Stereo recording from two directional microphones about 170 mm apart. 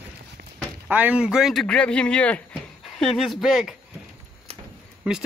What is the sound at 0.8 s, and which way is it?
Speech, 10° right (ahead or behind).